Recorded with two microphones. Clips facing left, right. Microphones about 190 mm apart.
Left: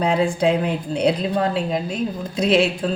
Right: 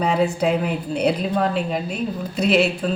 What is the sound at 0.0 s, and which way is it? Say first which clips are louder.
A woman's voice: left 1 dB; 5° right (ahead or behind).